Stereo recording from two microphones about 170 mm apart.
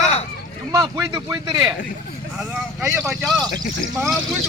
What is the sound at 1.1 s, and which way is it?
Speech, 20° right (ahead or behind).